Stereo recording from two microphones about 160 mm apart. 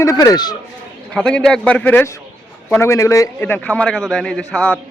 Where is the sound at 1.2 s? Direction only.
5° left (ahead or behind).